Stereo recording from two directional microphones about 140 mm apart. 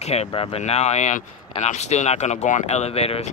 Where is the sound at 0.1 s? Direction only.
45° left (ahead or behind).